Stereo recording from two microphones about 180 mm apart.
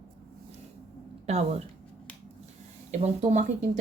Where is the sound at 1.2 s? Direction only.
35° right (ahead or behind).